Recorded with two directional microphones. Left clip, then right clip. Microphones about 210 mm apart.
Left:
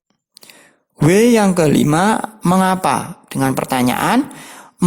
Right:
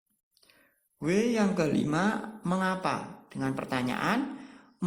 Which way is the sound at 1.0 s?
45° left (ahead or behind).